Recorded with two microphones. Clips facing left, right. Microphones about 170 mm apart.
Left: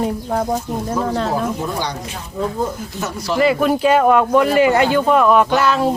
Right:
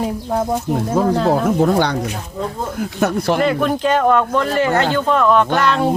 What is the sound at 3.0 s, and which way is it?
Speech, 55° right (ahead or behind).